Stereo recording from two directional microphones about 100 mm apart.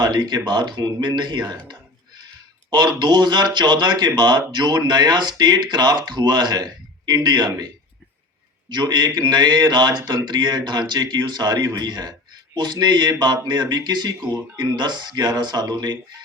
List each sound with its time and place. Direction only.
0.0 s speech: 45° right (ahead or behind)
8.7 s speech: 45° right (ahead or behind)